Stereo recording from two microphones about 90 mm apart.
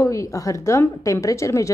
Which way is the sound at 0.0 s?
35° left (ahead or behind).